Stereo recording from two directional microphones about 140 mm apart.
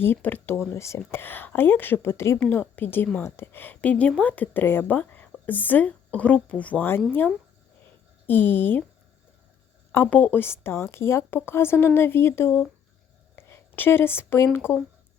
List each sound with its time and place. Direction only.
0.0 s a woman's voice: 15° left (ahead or behind)
8.3 s a woman's voice: 15° left (ahead or behind)
9.9 s a woman's voice: 15° left (ahead or behind)